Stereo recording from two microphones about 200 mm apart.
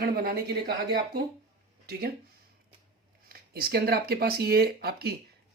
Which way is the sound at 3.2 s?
50° right (ahead or behind).